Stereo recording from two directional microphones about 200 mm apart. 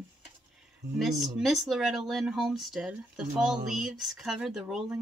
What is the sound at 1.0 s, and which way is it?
Speech, centre (ahead or behind).